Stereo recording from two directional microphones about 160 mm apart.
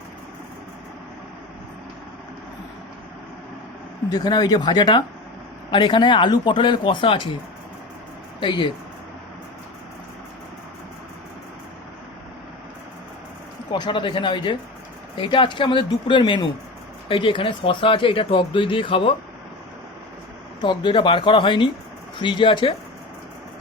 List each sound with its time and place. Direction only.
4.1 s speech: 25° left (ahead or behind)
8.4 s speech: 30° left (ahead or behind)
13.7 s speech: 25° left (ahead or behind)
20.6 s speech: 30° left (ahead or behind)